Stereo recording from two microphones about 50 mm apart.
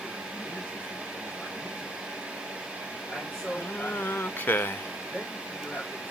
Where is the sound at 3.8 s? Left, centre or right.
Left.